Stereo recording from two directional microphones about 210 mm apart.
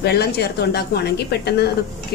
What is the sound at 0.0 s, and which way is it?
A woman's voice, 50° left (ahead or behind).